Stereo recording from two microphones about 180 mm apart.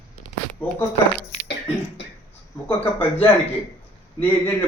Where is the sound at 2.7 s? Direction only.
10° left (ahead or behind).